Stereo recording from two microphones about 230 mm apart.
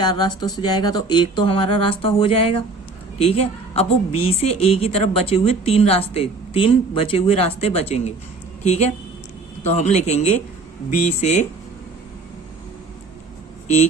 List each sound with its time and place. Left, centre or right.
0.0 s a woman's voice: centre